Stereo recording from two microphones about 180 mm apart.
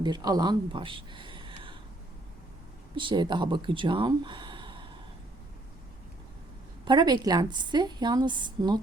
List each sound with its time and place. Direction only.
0.0 s speech: 25° right (ahead or behind)
2.9 s speech: 25° right (ahead or behind)
6.8 s a woman's voice: 25° right (ahead or behind)